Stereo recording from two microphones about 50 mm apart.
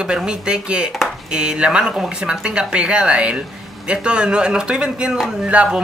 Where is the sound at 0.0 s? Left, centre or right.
Centre.